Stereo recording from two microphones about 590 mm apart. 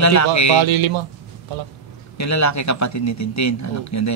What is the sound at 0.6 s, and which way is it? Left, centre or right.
Speech, right.